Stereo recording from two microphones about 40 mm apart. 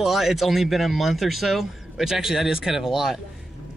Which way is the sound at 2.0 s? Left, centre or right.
Centre.